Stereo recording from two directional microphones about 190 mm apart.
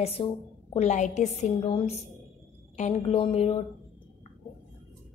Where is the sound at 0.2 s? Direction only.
30° left (ahead or behind).